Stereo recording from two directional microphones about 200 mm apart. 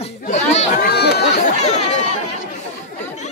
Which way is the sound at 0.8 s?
55° left (ahead or behind).